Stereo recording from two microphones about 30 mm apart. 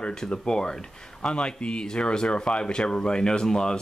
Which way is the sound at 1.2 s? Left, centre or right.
Left.